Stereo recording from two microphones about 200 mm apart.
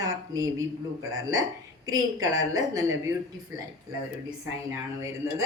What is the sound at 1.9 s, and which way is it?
Speech, 20° right (ahead or behind).